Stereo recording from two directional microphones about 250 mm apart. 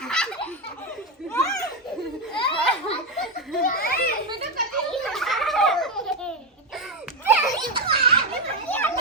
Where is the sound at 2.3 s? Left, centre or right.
Centre.